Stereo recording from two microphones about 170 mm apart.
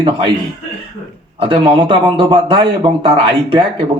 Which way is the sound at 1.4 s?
30° right (ahead or behind).